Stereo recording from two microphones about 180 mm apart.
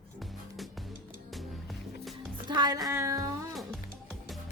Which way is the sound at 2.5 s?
20° right (ahead or behind).